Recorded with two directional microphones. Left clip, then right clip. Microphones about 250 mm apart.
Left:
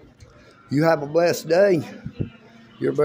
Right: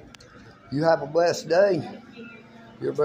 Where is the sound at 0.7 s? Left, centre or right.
Left.